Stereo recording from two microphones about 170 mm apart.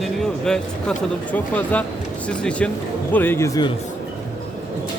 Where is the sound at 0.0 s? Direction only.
5° left (ahead or behind); by 3.7 s 20° left (ahead or behind).